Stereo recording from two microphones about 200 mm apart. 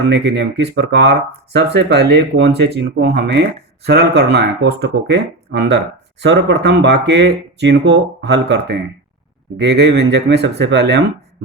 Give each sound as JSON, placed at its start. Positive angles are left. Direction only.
{"t": 0.1, "sound": "speech", "side_deg": -55}